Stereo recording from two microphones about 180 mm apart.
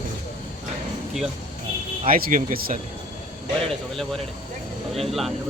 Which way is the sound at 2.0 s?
50° right (ahead or behind).